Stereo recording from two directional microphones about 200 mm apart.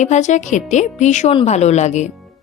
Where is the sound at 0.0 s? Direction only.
35° left (ahead or behind).